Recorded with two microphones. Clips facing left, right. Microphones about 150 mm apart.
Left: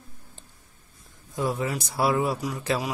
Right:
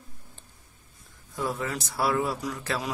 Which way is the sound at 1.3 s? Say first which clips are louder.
Left 3 dB; 20° left (ahead or behind).